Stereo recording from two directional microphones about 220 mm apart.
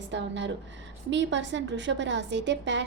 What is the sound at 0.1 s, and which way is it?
A woman's voice, 55° right (ahead or behind).